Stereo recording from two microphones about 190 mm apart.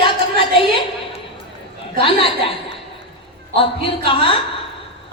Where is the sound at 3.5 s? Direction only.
30° left (ahead or behind).